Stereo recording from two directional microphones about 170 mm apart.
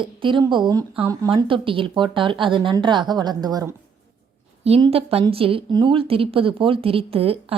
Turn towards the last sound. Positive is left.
turn(degrees=-35)  # may be behind; listen again after turning